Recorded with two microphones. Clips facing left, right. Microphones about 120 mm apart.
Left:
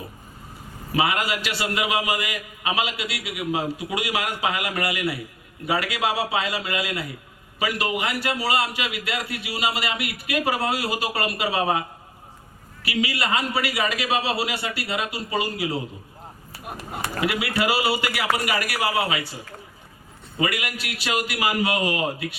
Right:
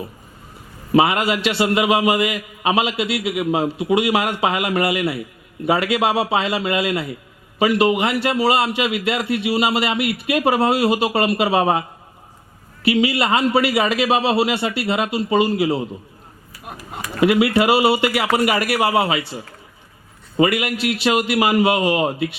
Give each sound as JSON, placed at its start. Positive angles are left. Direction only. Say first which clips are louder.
{"t": 0.9, "sound": "a man's voice", "louder": "right 7 dB", "side_deg": -25}
{"t": 12.8, "sound": "a man's voice", "louder": "right 8 dB", "side_deg": -25}
{"t": 17.2, "sound": "a man's voice", "louder": "right 9 dB", "side_deg": -25}
{"t": 20.4, "sound": "a man's voice", "louder": "right 9 dB", "side_deg": -25}